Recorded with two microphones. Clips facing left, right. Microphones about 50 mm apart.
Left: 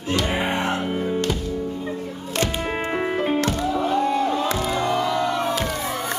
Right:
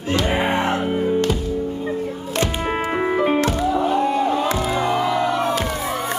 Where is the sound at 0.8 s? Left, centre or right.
Centre.